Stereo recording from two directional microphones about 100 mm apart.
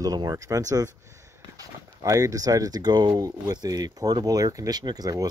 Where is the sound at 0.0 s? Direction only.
40° right (ahead or behind).